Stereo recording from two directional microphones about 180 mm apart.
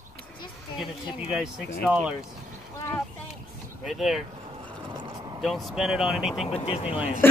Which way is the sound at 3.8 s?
Centre (ahead or behind).